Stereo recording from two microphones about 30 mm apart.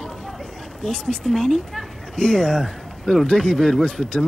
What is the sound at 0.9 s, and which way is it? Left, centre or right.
Speech, centre.